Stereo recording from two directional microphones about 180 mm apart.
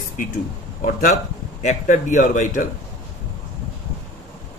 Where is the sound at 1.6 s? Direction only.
45° left (ahead or behind).